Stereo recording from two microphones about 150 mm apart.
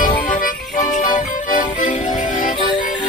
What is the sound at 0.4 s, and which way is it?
Music, 60° left (ahead or behind).